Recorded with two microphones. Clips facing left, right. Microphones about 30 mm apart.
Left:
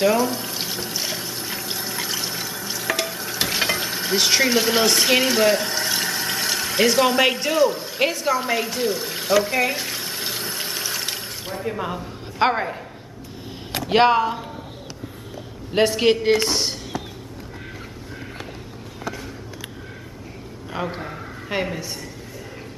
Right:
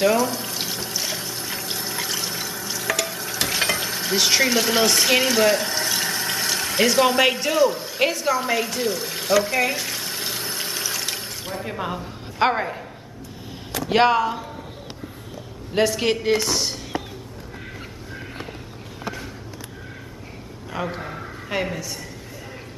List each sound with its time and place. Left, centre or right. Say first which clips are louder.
0.0 s water: even; centre
11.6 s a woman's voice: left 3 dB; centre
13.8 s a man's voice: left 1 dB; centre
15.7 s a man's voice: left 3 dB; centre
21.0 s a sound: even; centre
21.5 s a man's voice: left 1 dB; centre